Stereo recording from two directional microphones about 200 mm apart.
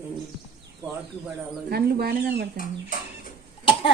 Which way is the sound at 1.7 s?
50° right (ahead or behind).